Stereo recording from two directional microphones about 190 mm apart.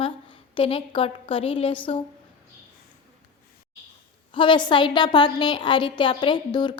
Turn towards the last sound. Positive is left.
turn(degrees=25)  # may be behind; listen again after turning